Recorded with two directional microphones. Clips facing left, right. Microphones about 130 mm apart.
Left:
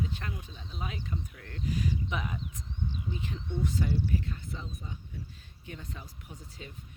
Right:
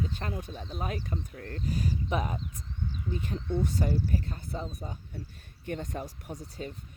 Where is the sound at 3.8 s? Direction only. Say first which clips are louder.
Right 1 dB; 40° right (ahead or behind).